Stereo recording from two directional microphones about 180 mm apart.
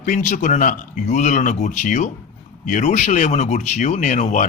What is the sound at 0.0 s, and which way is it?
A man's voice, 45° left (ahead or behind).